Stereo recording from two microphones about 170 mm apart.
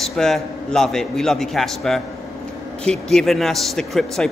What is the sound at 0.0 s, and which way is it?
Speech, centre (ahead or behind).